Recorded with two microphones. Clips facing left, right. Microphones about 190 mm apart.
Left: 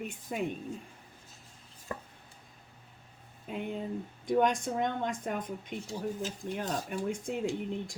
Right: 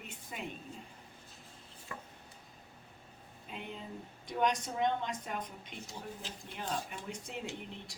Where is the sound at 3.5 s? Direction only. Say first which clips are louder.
Left 9 dB; 50° left (ahead or behind).